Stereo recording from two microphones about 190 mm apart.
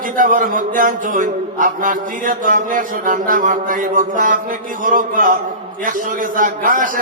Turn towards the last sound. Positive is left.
turn(degrees=-45)  # may be behind; listen again after turning